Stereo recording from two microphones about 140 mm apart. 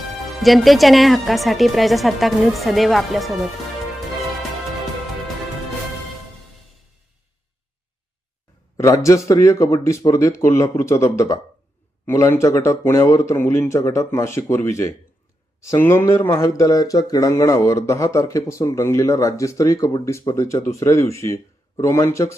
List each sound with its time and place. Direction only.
0.4 s speech: centre (ahead or behind)
8.8 s speech: 20° left (ahead or behind)